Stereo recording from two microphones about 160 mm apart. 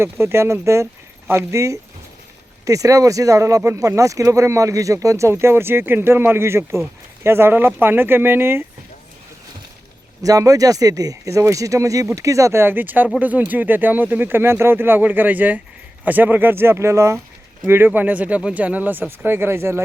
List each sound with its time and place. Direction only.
0.0 s speech: 15° right (ahead or behind)
10.2 s speech: 20° right (ahead or behind)